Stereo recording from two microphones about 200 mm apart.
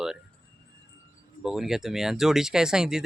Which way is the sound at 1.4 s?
Centre (ahead or behind).